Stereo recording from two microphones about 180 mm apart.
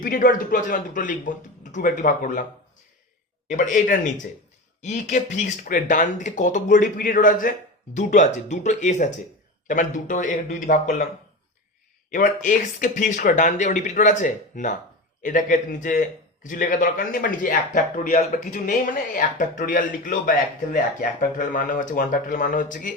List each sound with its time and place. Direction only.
0.0 s a man's voice: 50° left (ahead or behind)
3.5 s a man's voice: 45° left (ahead or behind)
12.1 s a man's voice: 45° left (ahead or behind)